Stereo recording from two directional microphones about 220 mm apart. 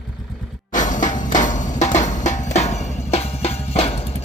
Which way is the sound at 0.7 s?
35° left (ahead or behind).